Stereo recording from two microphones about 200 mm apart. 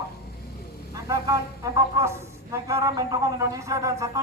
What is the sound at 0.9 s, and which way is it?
Speech, 15° right (ahead or behind).